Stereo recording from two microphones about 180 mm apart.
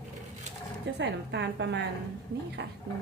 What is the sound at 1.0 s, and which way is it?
A woman's voice, 75° right (ahead or behind).